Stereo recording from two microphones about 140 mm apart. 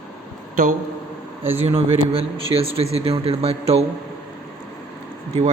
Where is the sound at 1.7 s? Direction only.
45° right (ahead or behind).